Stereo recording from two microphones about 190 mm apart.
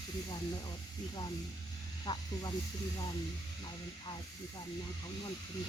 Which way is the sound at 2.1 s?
20° left (ahead or behind).